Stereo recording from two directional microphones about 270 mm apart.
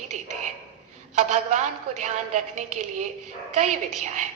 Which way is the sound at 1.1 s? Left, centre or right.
Right.